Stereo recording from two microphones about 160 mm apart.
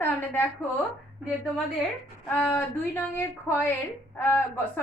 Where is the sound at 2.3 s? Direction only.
10° left (ahead or behind).